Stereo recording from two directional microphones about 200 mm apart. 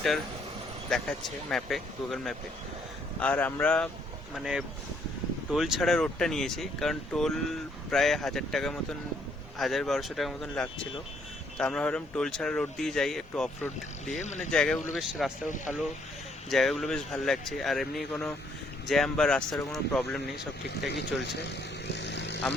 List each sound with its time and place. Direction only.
0.9 s speech: centre (ahead or behind)
14.1 s speech: 35° left (ahead or behind)
14.5 s speech: 5° left (ahead or behind)
15.4 s speech: 40° left (ahead or behind)
16.5 s speech: centre (ahead or behind)
20.7 s speech: 55° left (ahead or behind)
21.5 s vehicle: 60° left (ahead or behind)